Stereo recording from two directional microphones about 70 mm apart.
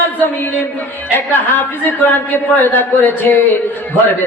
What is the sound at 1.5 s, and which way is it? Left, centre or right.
A man's voice, left.